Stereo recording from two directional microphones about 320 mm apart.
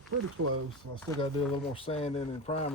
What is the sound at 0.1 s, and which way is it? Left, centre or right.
Speech, right.